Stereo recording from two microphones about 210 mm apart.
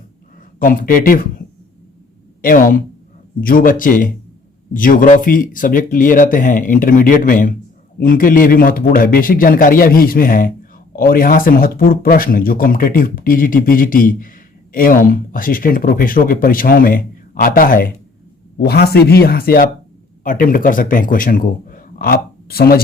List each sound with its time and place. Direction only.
0.6 s speech: 40° left (ahead or behind)
2.4 s speech: 40° left (ahead or behind)